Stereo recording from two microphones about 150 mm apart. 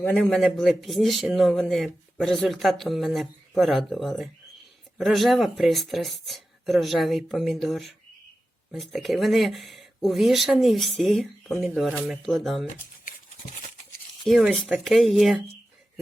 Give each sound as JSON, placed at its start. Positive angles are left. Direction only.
{"t": 0.0, "sound": "a man's voice", "side_deg": 10}
{"t": 13.1, "sound": "a sound", "side_deg": 60}
{"t": 14.3, "sound": "a man's voice", "side_deg": 0}